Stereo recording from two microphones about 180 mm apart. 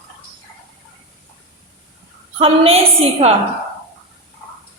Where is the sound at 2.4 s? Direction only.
35° right (ahead or behind).